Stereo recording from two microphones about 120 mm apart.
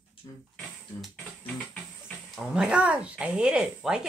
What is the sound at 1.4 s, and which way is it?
Music, 10° left (ahead or behind).